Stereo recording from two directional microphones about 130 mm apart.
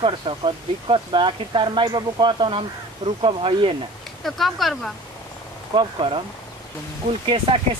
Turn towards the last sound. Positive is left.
turn(degrees=-40)  # may be behind; listen again after turning